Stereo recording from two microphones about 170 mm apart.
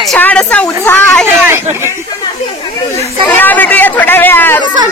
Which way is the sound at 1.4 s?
15° right (ahead or behind).